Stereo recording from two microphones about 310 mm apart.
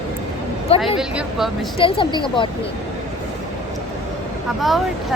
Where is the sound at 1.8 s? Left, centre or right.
Centre.